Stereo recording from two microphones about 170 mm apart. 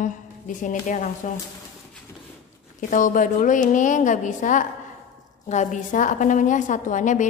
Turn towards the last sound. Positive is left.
turn(degrees=45)  # may be behind; listen again after turning